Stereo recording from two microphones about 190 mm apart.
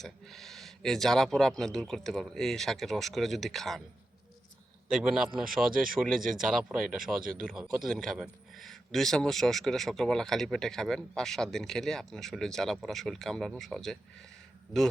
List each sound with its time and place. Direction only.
0.0 s a man's voice: centre (ahead or behind)
4.9 s a man's voice: centre (ahead or behind)